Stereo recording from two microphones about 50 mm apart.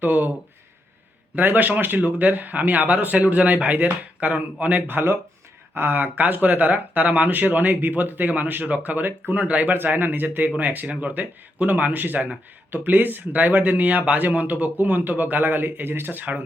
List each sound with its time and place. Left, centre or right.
0.0 s speech: right
1.4 s speech: right
9.7 s speech: right